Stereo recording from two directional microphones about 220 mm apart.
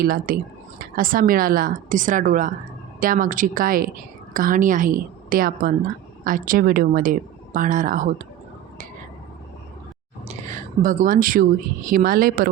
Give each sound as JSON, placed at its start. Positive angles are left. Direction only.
{"t": 0.0, "sound": "a woman's voice", "side_deg": -40}
{"t": 10.2, "sound": "a sound", "side_deg": -35}
{"t": 11.9, "sound": "a woman's voice", "side_deg": -40}